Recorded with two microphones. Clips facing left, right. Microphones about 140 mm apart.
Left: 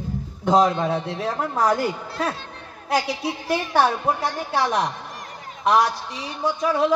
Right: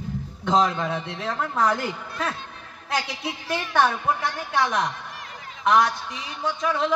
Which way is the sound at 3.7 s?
35° left (ahead or behind).